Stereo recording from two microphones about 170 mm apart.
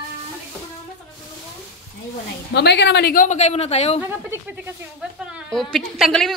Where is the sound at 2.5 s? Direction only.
85° left; by 4.0 s 35° left (ahead or behind).